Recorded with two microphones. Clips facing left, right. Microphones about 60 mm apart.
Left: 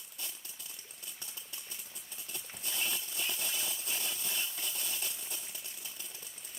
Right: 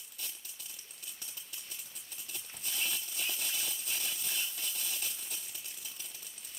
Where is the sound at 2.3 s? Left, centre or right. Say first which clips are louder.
Left 1 dB; left.